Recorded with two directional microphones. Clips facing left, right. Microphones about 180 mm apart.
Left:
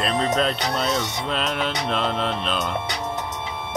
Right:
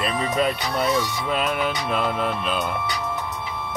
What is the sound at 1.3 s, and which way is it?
Music, 5° right (ahead or behind).